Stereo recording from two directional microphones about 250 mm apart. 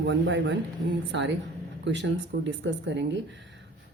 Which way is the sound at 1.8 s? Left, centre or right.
Right.